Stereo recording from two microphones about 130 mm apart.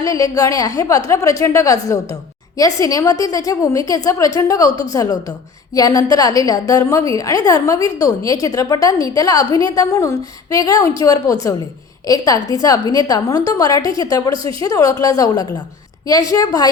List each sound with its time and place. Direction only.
0.0 s a woman's voice: 25° left (ahead or behind)